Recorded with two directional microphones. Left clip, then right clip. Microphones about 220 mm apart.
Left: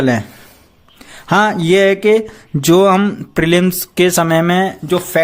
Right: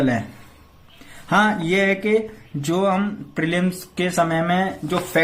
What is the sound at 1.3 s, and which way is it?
Speech, 50° left (ahead or behind).